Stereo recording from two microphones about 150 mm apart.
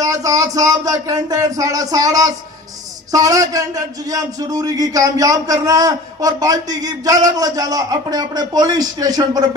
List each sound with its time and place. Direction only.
0.0 s a man's voice: 20° right (ahead or behind)